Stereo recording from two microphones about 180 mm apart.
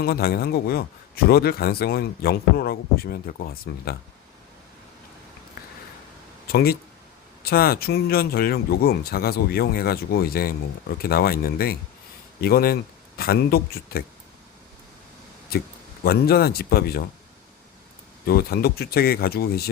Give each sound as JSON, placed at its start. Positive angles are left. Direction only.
{"t": 0.0, "sound": "speech", "side_deg": 60}
{"t": 6.5, "sound": "speech", "side_deg": 55}
{"t": 15.5, "sound": "speech", "side_deg": 60}
{"t": 18.3, "sound": "speech", "side_deg": 60}